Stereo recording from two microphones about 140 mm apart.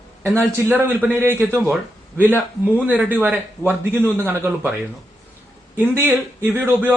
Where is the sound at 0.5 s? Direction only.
15° right (ahead or behind).